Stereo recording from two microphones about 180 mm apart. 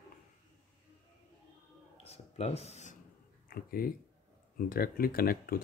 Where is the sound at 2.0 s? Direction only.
35° left (ahead or behind).